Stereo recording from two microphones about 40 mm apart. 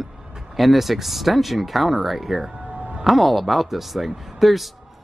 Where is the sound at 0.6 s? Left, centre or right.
Centre.